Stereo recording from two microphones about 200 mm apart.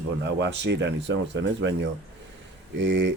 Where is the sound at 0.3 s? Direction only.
60° right (ahead or behind).